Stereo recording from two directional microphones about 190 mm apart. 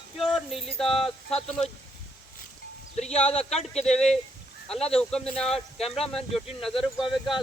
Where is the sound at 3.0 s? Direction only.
35° left (ahead or behind).